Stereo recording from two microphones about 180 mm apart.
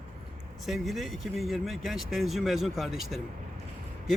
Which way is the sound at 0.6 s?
Centre (ahead or behind).